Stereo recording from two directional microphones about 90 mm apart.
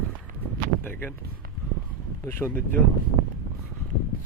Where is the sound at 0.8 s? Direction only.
20° left (ahead or behind).